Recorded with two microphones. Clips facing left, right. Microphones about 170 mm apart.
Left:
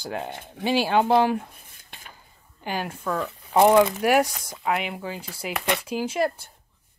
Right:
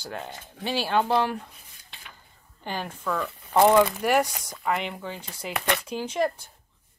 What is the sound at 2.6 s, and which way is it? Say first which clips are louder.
Speech: left 2 dB; 5° left (ahead or behind).